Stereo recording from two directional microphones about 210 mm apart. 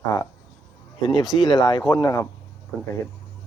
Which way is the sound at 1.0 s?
20° left (ahead or behind).